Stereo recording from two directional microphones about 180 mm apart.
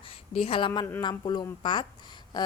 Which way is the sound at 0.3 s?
30° left (ahead or behind).